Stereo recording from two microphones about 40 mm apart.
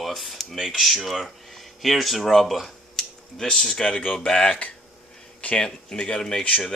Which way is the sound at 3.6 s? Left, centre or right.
Centre.